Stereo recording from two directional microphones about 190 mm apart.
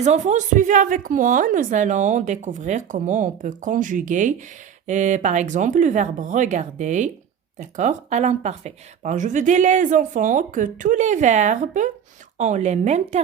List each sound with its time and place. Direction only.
0.0 s a woman's voice: 40° right (ahead or behind)